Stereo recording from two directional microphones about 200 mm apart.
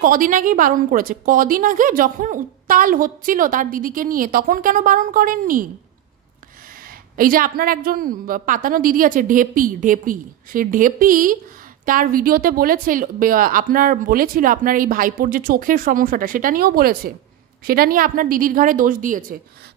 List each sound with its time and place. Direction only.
0.0 s a woman's voice: 45° right (ahead or behind)
7.2 s a woman's voice: 45° right (ahead or behind)